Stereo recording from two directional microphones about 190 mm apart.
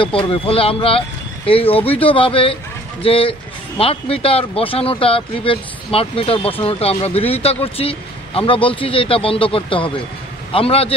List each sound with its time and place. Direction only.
0.3 s a man's voice: 30° left (ahead or behind)